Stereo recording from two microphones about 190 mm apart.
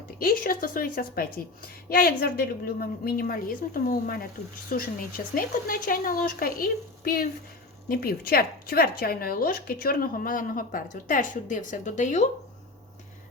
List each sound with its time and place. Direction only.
0.2 s a woman's voice: 50° left (ahead or behind)